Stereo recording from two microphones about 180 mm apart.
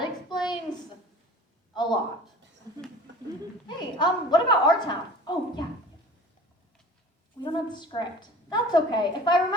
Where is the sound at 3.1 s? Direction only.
85° right.